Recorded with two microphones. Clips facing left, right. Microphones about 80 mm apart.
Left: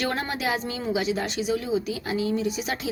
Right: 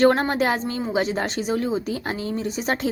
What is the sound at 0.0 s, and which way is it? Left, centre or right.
Speech, right.